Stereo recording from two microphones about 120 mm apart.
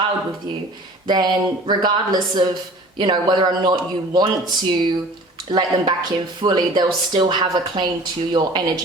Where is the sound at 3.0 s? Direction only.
40° right (ahead or behind).